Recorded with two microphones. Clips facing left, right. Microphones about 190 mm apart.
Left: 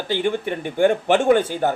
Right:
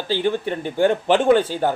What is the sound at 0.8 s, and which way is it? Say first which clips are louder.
Speech: even; 50° left (ahead or behind).